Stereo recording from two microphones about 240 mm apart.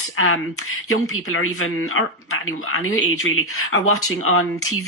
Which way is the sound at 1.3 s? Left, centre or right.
Left.